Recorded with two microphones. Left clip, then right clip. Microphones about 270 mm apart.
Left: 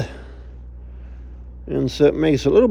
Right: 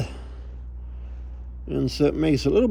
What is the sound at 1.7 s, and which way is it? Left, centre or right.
Speech, centre.